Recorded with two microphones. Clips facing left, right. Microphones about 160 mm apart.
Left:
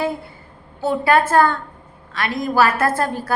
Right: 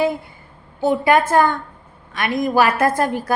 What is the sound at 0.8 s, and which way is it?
A woman's voice, 15° right (ahead or behind).